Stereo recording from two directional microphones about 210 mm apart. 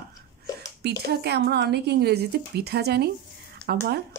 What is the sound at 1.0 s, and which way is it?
A woman's voice, 50° right (ahead or behind).